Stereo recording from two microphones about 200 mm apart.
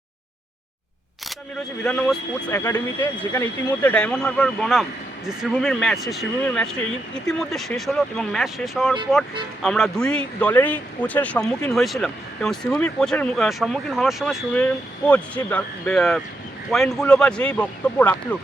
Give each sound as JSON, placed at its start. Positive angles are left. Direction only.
{"t": 1.8, "sound": "a man's voice", "side_deg": 5}